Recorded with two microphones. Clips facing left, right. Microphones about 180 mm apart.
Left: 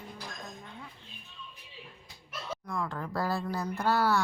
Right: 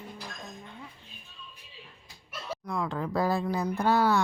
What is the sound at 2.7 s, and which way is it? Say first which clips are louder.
Speech: right 5 dB; 15° right (ahead or behind).